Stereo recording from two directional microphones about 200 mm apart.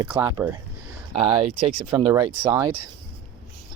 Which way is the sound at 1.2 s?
30° right (ahead or behind).